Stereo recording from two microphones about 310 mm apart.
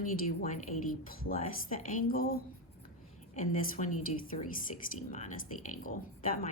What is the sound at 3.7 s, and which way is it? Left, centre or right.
A woman's voice, left.